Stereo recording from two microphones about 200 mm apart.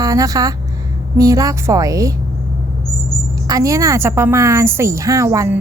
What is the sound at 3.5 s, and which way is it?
A woman's voice, 15° right (ahead or behind).